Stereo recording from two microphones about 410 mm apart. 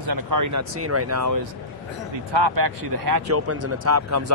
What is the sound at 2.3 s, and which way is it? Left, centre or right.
Speech, right.